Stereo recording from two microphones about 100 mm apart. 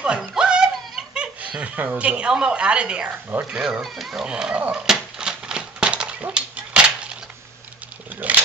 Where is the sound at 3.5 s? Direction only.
5° right (ahead or behind).